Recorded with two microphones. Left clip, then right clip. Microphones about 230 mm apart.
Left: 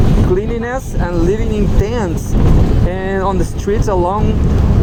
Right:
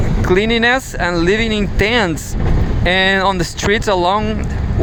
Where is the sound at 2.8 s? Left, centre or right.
Right.